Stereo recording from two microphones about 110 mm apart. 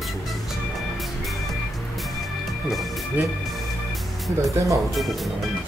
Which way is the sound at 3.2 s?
15° right (ahead or behind).